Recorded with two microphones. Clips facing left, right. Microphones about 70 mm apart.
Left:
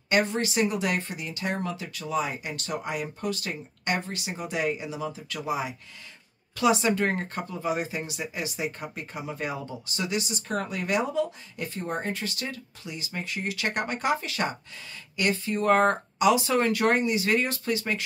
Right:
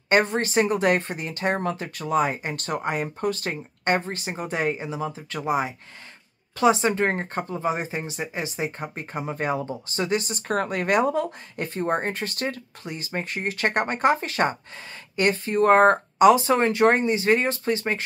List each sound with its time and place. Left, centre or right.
0.1 s speech: right